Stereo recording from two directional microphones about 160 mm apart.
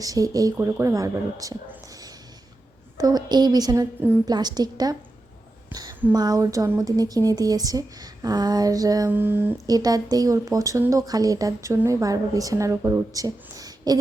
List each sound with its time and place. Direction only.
0.0 s speech: 20° right (ahead or behind)
3.0 s speech: 25° right (ahead or behind)
6.1 s speech: 25° right (ahead or behind)
9.6 s speech: 25° right (ahead or behind)